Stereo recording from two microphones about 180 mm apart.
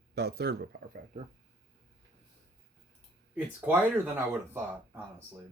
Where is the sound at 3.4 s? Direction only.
10° right (ahead or behind).